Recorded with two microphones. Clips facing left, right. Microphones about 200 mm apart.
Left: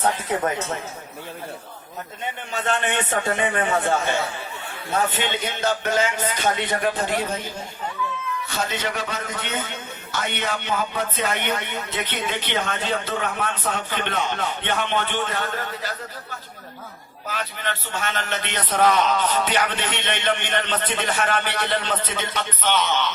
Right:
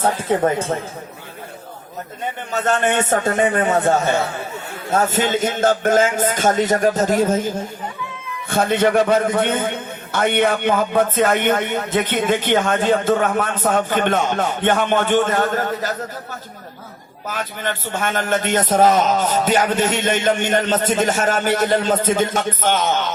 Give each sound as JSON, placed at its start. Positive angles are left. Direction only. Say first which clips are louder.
{"t": 0.0, "sound": "speech", "louder": "right 5 dB", "side_deg": -30}
{"t": 2.5, "sound": "a man's voice", "louder": "right 6 dB", "side_deg": -45}
{"t": 17.2, "sound": "a man's voice", "louder": "right 4 dB", "side_deg": -45}